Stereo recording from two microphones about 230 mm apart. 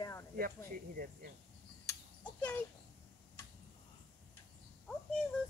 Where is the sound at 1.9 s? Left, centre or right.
Centre.